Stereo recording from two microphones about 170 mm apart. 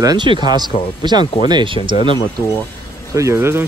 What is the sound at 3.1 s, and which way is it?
Speech, 15° right (ahead or behind).